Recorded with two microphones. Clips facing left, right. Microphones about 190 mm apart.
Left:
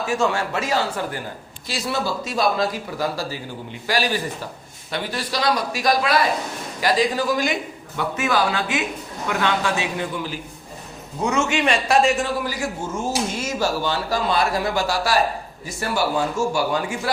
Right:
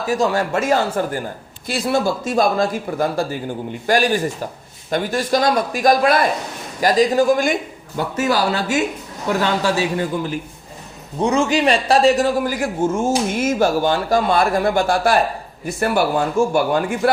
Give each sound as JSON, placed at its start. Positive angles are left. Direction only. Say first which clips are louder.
{"t": 0.0, "sound": "a man's voice", "louder": "right 3 dB", "side_deg": -40}